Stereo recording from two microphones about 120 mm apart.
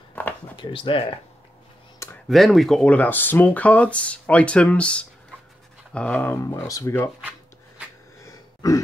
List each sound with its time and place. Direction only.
0.2 s a sound: 10° left (ahead or behind)
0.6 s speech: 45° left (ahead or behind)
2.2 s speech: centre (ahead or behind)
6.5 s speech: 25° left (ahead or behind)
8.2 s throat clearing: 30° left (ahead or behind)